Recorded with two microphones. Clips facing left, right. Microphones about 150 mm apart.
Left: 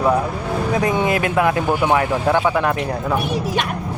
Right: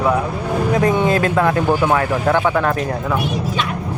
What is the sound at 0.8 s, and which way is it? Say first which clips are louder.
Speech: right 3 dB; 15° left (ahead or behind).